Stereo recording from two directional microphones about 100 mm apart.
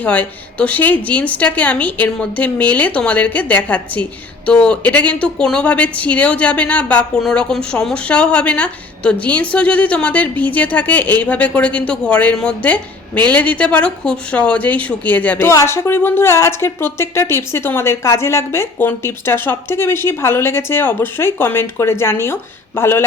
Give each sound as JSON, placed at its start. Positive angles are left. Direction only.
{"t": 0.0, "sound": "speech", "side_deg": 15}